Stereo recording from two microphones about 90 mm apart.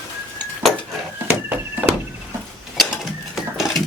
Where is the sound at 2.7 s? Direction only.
5° right (ahead or behind).